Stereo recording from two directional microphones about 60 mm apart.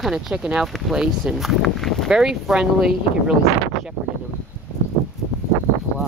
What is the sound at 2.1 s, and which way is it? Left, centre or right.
Speech, centre.